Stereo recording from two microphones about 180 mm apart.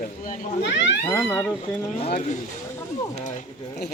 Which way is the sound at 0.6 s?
75° left (ahead or behind).